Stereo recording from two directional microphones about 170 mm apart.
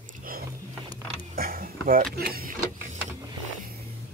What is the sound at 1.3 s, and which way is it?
Mechanisms, 60° right (ahead or behind).